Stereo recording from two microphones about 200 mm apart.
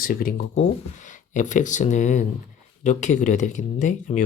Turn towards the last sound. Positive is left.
turn(degrees=40)  # may be behind; listen again after turning